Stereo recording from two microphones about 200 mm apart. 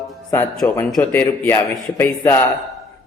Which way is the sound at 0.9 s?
5° left (ahead or behind).